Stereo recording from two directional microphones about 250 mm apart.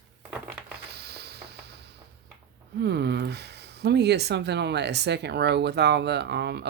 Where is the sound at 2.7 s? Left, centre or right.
Right.